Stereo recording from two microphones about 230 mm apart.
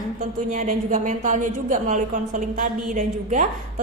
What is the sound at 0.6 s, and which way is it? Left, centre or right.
A woman's voice, right.